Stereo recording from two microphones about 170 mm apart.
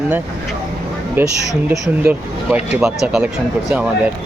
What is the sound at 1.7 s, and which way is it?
Speech, 10° right (ahead or behind).